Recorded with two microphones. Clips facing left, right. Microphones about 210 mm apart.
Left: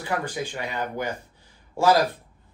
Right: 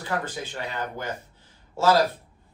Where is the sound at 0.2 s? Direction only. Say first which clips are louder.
Left 3 dB; 15° left (ahead or behind).